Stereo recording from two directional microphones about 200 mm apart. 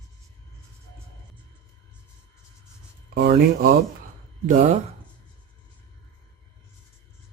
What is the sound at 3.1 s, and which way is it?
Speech, 50° right (ahead or behind).